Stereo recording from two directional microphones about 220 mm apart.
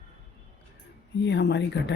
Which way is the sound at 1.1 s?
50° left (ahead or behind).